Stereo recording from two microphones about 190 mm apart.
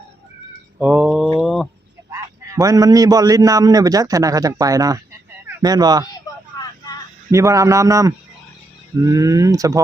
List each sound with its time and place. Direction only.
0.8 s mantra: 5° right (ahead or behind)
1.4 s chicken: centre (ahead or behind)
2.6 s a man's voice: 20° right (ahead or behind)
7.3 s a man's voice: 15° right (ahead or behind)